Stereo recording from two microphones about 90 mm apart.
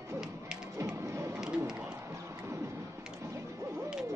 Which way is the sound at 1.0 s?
35° right (ahead or behind).